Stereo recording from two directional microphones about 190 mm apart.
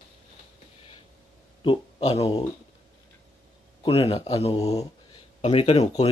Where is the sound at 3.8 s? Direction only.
30° left (ahead or behind).